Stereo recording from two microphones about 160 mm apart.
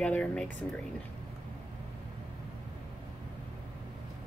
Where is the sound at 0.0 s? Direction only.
5° left (ahead or behind).